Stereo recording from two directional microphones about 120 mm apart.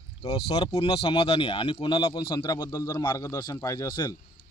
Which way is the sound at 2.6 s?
30° left (ahead or behind).